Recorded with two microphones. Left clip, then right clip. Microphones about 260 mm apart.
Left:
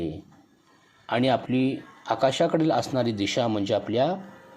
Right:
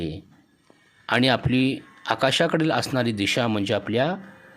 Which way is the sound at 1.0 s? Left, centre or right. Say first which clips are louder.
Right 3 dB; right.